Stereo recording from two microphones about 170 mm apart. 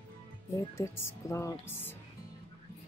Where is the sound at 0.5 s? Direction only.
15° left (ahead or behind).